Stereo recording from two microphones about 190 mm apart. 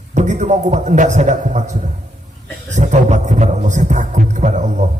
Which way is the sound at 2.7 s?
40° right (ahead or behind).